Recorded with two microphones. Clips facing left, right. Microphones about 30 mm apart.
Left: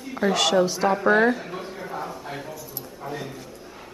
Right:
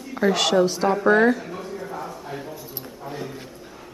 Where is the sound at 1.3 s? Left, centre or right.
Centre.